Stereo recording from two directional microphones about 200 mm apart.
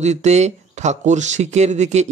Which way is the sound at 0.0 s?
35° right (ahead or behind).